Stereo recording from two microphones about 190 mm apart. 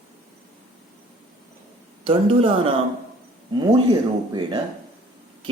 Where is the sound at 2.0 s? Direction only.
30° right (ahead or behind).